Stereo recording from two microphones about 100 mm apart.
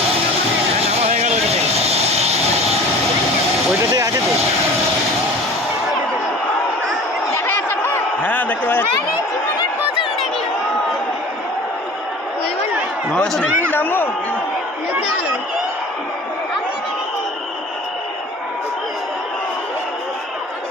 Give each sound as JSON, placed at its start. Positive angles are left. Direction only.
{"t": 0.9, "sound": "vehicle", "side_deg": -90}
{"t": 7.3, "sound": "a sound", "side_deg": 20}
{"t": 13.1, "sound": "speech", "side_deg": 5}
{"t": 13.4, "sound": "speech", "side_deg": 20}